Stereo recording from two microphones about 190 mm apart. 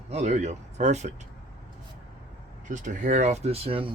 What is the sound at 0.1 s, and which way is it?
Speech, 35° right (ahead or behind).